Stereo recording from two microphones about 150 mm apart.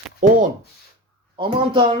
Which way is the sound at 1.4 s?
35° right (ahead or behind).